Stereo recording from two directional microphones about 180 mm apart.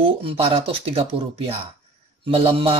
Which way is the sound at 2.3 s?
30° right (ahead or behind).